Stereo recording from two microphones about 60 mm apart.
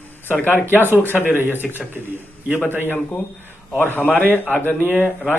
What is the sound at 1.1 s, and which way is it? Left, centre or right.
Speech, right.